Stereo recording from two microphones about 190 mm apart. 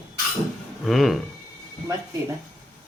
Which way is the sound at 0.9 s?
Centre (ahead or behind).